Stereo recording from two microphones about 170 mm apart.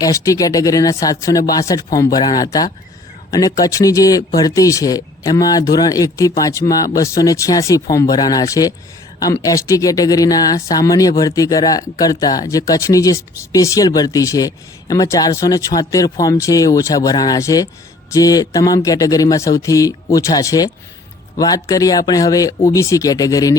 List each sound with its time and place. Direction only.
0.0 s speech: 20° left (ahead or behind)